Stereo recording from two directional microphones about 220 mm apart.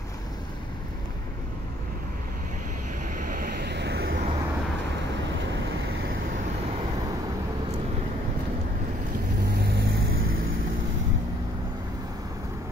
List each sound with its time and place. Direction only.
3.2 s vehicle: 40° right (ahead or behind)
9.5 s vehicle: 45° right (ahead or behind)